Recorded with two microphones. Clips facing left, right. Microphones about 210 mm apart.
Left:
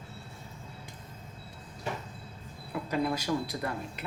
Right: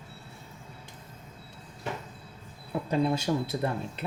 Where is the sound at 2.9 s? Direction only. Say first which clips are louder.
Right 3 dB; 25° right (ahead or behind).